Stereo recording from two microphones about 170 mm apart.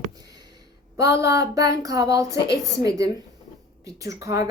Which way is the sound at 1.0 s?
15° right (ahead or behind).